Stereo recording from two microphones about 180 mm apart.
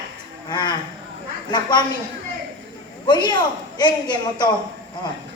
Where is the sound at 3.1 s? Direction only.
25° left (ahead or behind).